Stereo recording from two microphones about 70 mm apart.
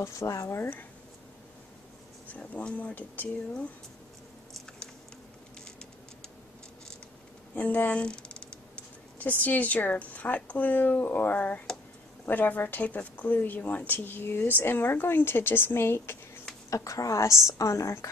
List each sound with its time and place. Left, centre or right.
0.0 s a woman's voice: left
0.6 s a woman's voice: left
2.3 s a woman's voice: left
7.5 s a woman's voice: left
8.0 s a woman's voice: centre; by 16.2 s left
16.7 s a woman's voice: left